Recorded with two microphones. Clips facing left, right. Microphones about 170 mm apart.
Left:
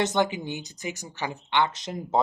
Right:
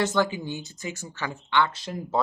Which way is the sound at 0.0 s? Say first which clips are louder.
Even; 20° left (ahead or behind).